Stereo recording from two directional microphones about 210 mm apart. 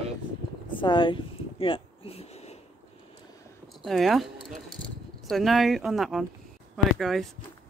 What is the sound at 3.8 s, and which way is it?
Speech, centre (ahead or behind).